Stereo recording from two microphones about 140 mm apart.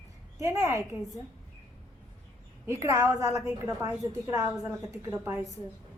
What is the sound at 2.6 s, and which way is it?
A woman's voice, 20° right (ahead or behind).